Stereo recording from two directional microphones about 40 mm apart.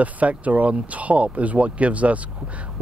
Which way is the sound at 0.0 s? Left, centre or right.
Right.